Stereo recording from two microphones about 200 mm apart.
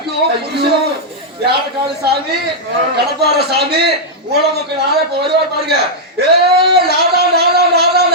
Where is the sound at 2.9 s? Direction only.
55° right (ahead or behind).